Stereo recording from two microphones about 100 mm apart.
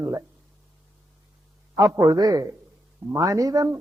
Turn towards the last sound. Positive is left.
turn(degrees=-35)  # may be behind; listen again after turning